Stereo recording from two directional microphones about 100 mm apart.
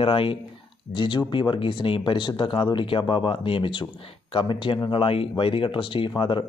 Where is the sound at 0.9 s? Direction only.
50° left (ahead or behind).